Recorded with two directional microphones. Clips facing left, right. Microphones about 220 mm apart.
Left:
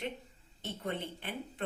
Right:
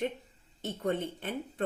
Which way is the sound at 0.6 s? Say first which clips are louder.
Right 6 dB; 45° right (ahead or behind).